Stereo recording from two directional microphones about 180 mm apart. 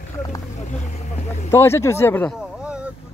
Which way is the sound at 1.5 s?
15° left (ahead or behind).